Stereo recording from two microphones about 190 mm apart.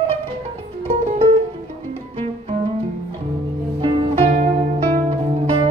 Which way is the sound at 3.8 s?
25° right (ahead or behind).